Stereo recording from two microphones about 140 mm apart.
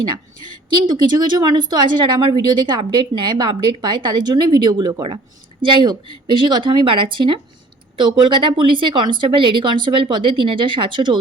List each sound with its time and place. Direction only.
0.1 s a woman's voice: 30° right (ahead or behind)